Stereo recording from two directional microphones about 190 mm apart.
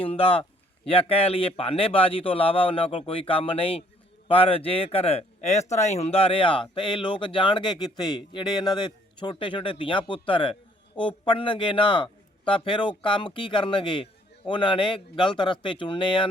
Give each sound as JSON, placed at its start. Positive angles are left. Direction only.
{"t": 0.0, "sound": "speech", "side_deg": 30}